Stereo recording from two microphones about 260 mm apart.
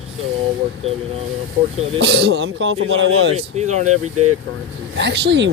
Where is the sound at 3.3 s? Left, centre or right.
Right.